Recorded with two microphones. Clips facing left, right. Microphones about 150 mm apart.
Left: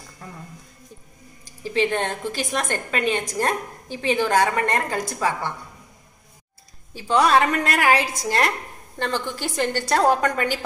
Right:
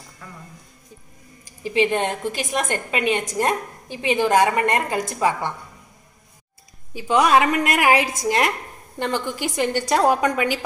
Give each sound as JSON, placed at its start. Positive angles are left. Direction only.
{"t": 1.6, "sound": "a woman's voice", "side_deg": -15}
{"t": 6.9, "sound": "a woman's voice", "side_deg": -15}